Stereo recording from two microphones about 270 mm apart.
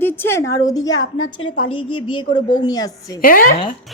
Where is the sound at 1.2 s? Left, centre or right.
Left.